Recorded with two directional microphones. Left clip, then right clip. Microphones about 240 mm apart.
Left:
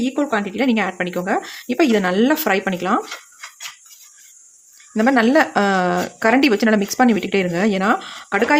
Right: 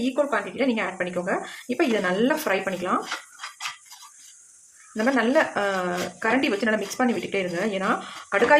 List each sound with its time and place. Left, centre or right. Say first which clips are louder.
0.0 s speech: left 3 dB; left
4.9 s speech: left 6 dB; left